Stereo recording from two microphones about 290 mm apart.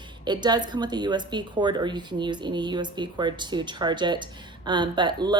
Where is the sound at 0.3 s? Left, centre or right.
Centre.